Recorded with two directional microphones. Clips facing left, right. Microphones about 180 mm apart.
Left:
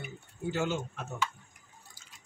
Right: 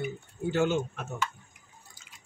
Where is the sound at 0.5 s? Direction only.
65° right (ahead or behind).